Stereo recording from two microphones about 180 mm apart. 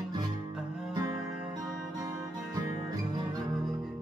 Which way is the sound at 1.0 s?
20° right (ahead or behind).